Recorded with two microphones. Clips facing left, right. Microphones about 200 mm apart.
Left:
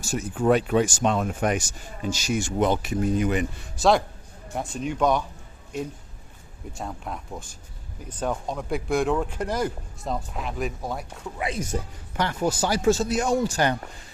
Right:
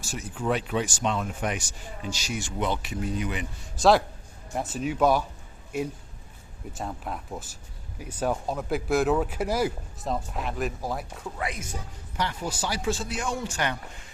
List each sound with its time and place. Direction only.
0.0 s speech: 45° left (ahead or behind)
4.5 s speech: 5° right (ahead or behind)
6.7 s speech: centre (ahead or behind)
11.3 s speech: 25° left (ahead or behind)
12.1 s speech: 50° left (ahead or behind)